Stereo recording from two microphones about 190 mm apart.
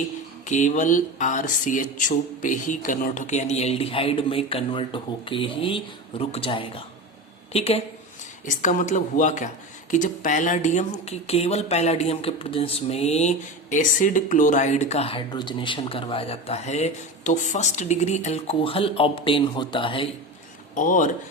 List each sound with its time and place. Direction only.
0.4 s speech: 40° left (ahead or behind)
8.4 s speech: 40° left (ahead or behind); by 20.1 s 25° left (ahead or behind)
20.7 s speech: 45° left (ahead or behind)